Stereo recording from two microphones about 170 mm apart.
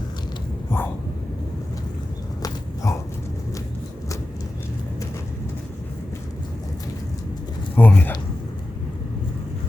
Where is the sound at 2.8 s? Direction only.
20° left (ahead or behind).